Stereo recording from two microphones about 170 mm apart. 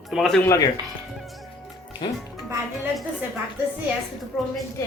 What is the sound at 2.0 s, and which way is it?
Speech, 30° left (ahead or behind).